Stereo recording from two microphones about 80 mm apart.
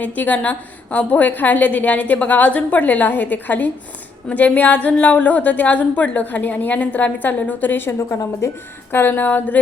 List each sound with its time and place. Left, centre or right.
0.0 s a woman's voice: centre
7.9 s a woman's voice: left
8.9 s a woman's voice: left